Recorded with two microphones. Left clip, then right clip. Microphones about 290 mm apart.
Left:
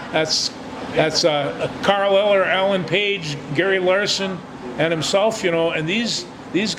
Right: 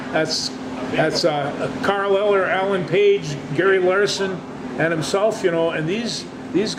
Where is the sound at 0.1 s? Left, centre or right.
Left.